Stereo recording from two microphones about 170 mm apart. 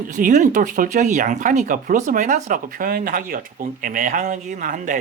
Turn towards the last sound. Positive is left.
turn(degrees=-50)  # may be behind; listen again after turning